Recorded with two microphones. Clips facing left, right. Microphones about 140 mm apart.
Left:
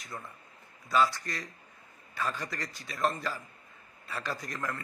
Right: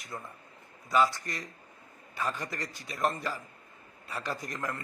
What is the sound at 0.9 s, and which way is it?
A man's voice, 15° right (ahead or behind).